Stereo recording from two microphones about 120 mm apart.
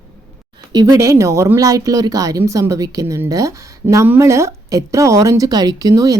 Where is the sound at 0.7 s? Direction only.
30° right (ahead or behind).